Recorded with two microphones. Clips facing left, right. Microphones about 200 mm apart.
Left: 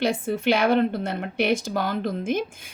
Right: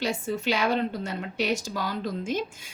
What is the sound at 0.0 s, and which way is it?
Speech, 55° left (ahead or behind).